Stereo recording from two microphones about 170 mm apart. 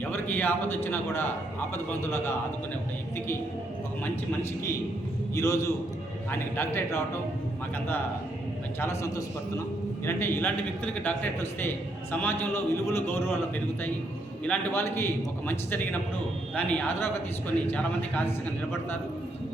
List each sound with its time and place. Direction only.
0.0 s a man's voice: 10° left (ahead or behind)
5.3 s a man's voice: 20° left (ahead or behind)
8.8 s a man's voice: 15° left (ahead or behind)
14.4 s a man's voice: 10° left (ahead or behind)